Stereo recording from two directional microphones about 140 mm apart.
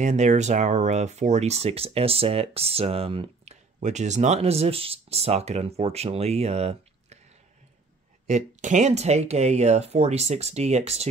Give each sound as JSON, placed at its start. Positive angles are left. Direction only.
{"t": 0.0, "sound": "speech", "side_deg": -55}
{"t": 3.8, "sound": "speech", "side_deg": -55}
{"t": 8.3, "sound": "speech", "side_deg": -60}